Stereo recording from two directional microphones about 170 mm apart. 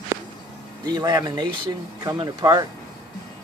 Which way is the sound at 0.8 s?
20° right (ahead or behind).